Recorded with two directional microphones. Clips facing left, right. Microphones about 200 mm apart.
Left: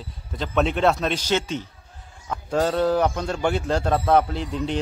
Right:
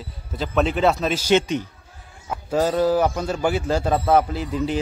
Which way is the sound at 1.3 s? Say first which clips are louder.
Right 8 dB; 15° right (ahead or behind).